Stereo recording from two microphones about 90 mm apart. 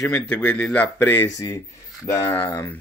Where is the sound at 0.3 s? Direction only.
15° left (ahead or behind).